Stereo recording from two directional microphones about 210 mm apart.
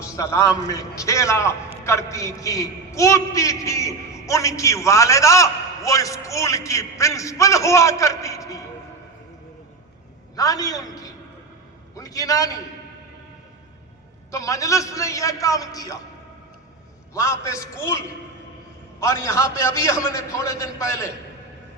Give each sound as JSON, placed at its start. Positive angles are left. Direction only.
{"t": 0.0, "sound": "a man's voice", "side_deg": 15}
{"t": 10.3, "sound": "a man's voice", "side_deg": 15}
{"t": 14.3, "sound": "a man's voice", "side_deg": 15}
{"t": 17.2, "sound": "a man's voice", "side_deg": 15}